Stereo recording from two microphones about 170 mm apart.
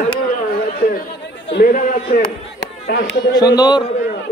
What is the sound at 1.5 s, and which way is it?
Speech, 85° left.